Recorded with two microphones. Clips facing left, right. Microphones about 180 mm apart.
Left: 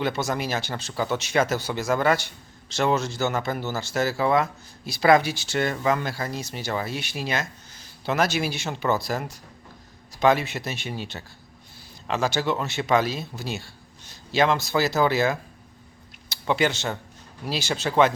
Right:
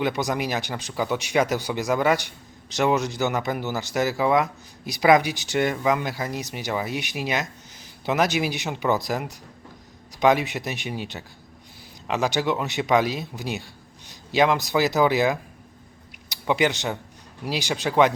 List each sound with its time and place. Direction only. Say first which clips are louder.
0.0 s speech: right 1 dB; 15° right (ahead or behind)